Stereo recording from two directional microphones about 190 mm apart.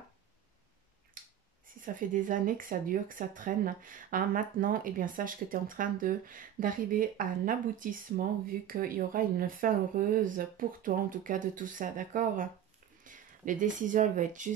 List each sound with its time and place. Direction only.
1.2 s finger snapping: 45° right (ahead or behind)
1.8 s speech: 45° right (ahead or behind)